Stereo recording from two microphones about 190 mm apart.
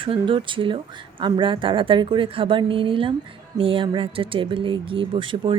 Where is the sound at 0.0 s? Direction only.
25° right (ahead or behind).